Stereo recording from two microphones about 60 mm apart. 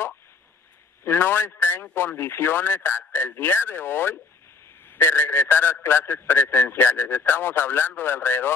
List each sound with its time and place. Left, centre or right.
1.0 s a man's voice: left